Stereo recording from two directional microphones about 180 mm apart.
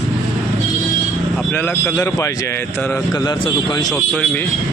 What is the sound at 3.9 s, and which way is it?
Speech, 5° left (ahead or behind).